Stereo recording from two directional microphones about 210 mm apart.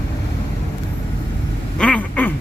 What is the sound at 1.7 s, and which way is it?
Quack, 5° left (ahead or behind).